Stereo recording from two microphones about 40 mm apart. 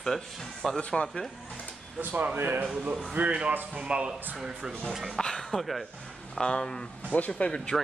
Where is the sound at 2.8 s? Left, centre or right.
Right.